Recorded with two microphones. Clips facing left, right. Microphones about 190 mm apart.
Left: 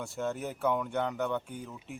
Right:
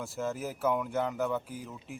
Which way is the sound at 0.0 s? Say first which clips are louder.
Even; centre (ahead or behind).